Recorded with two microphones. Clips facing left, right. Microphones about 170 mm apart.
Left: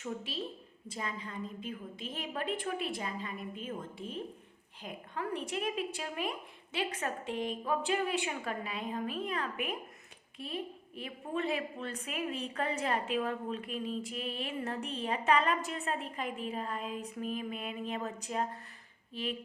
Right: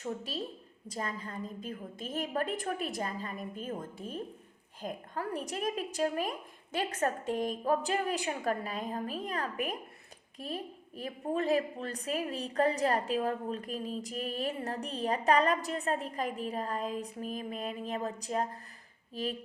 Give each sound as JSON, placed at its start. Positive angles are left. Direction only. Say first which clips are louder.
{"t": 0.0, "sound": "a woman's voice", "louder": "right 2 dB", "side_deg": -40}